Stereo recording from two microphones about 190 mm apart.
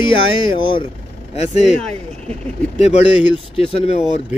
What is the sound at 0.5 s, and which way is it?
Speech, 25° left (ahead or behind).